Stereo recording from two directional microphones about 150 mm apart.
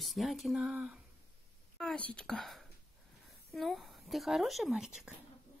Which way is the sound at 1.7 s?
5° left (ahead or behind).